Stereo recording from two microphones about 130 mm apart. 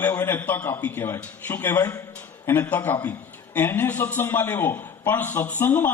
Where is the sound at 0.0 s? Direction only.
15° left (ahead or behind).